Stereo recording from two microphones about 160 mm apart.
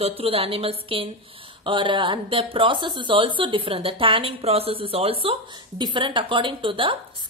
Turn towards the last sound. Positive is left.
turn(degrees=-30)  # may be behind; listen again after turning